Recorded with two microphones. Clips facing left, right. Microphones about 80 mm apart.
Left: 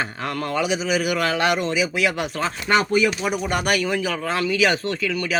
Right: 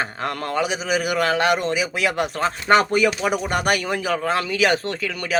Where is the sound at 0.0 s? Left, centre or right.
Right.